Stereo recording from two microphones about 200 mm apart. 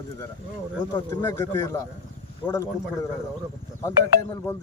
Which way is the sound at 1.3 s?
15° left (ahead or behind).